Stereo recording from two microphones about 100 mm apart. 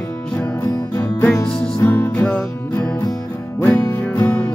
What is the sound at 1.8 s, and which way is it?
Music, 20° left (ahead or behind).